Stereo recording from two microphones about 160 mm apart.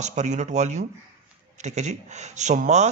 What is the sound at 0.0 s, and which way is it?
Speech, 45° right (ahead or behind).